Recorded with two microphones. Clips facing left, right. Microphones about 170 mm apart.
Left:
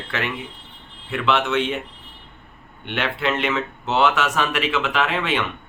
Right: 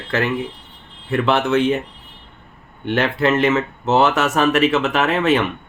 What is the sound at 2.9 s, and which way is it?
Speech, 40° right (ahead or behind).